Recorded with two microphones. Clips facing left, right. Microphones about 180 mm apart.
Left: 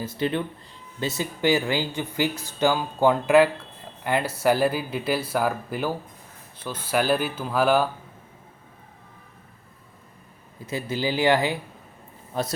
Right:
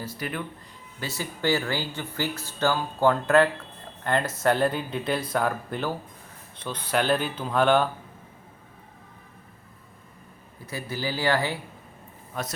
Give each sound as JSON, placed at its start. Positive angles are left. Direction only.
{"t": 0.0, "sound": "speech", "side_deg": 25}
{"t": 10.7, "sound": "speech", "side_deg": 20}
{"t": 12.3, "sound": "a man's voice", "side_deg": 30}